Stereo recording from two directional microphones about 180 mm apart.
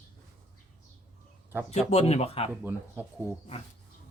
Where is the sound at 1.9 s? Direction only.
35° left (ahead or behind).